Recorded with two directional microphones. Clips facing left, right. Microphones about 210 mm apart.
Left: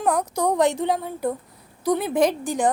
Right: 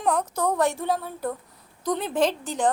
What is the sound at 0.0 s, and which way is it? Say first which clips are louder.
A woman's voice: left 2 dB; 10° left (ahead or behind).